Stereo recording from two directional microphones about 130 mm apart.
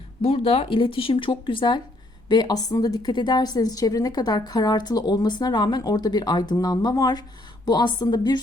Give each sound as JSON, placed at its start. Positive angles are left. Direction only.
{"t": 0.2, "sound": "a woman's voice", "side_deg": 50}